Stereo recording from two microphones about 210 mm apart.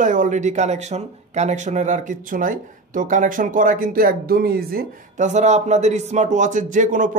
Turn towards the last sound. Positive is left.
turn(degrees=-40)  # may be behind; listen again after turning